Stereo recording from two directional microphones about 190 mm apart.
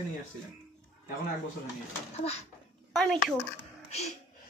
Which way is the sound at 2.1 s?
35° left (ahead or behind).